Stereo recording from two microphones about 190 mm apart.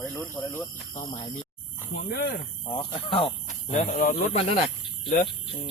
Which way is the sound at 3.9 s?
45° left (ahead or behind).